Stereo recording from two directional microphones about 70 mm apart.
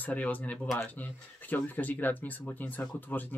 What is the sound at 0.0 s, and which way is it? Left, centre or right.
Speech, left.